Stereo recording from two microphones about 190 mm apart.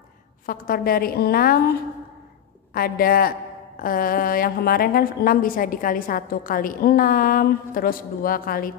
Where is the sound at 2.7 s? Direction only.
50° left (ahead or behind).